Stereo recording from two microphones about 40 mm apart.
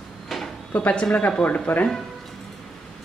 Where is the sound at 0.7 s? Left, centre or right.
Left.